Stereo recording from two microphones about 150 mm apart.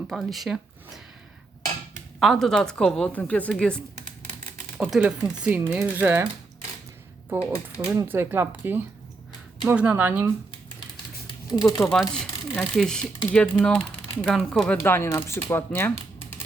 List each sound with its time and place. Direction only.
0.1 s a woman's voice: centre (ahead or behind)
2.1 s a woman's voice: centre (ahead or behind)
4.8 s speech: 5° right (ahead or behind)
7.3 s speech: 15° right (ahead or behind)
11.3 s a sound: 25° left (ahead or behind)
11.8 s a woman's voice: centre (ahead or behind)
14.8 s speech: 15° left (ahead or behind)